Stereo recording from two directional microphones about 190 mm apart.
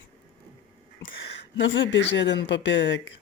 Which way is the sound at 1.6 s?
75° left (ahead or behind).